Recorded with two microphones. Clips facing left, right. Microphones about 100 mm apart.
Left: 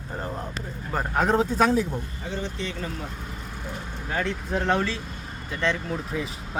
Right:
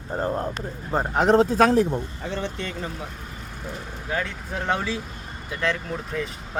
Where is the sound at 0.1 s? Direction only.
30° right (ahead or behind).